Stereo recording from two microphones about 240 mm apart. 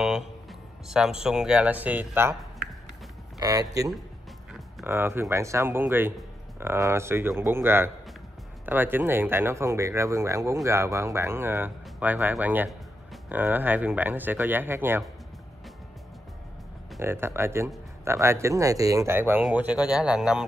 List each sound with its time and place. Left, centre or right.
0.0 s speech: centre
4.6 s music: centre
4.9 s speech: centre
16.9 s speech: centre